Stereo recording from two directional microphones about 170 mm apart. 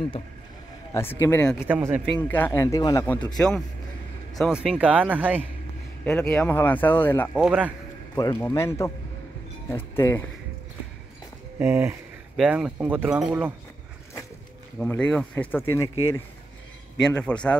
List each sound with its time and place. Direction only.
0.9 s speech: 15° left (ahead or behind)
1.7 s speech: 15° right (ahead or behind)
2.2 s speech: 10° left (ahead or behind)
3.3 s a man's voice: 5° left (ahead or behind)
6.0 s speech: 5° left (ahead or behind)
7.3 s a man's voice: 5° right (ahead or behind)
8.2 s speech: 15° left (ahead or behind)
9.9 s speech: 15° left (ahead or behind)
11.6 s speech: 15° right (ahead or behind)
14.8 s speech: 5° left (ahead or behind)